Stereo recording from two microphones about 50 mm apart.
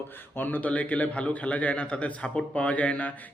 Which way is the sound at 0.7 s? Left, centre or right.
Left.